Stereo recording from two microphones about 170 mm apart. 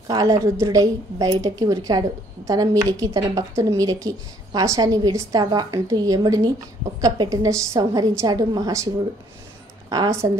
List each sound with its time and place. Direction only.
0.1 s a woman's voice: 20° right (ahead or behind)